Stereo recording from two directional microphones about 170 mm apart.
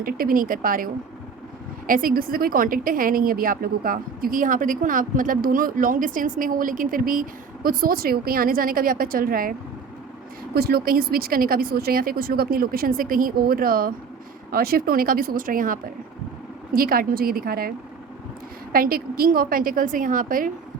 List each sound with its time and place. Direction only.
0.0 s a woman's voice: 55° right (ahead or behind)
1.9 s a woman's voice: 55° right (ahead or behind)
18.7 s a woman's voice: 60° right (ahead or behind)